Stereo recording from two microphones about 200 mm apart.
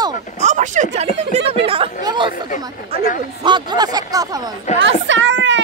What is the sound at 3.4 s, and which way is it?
Speech, 20° right (ahead or behind).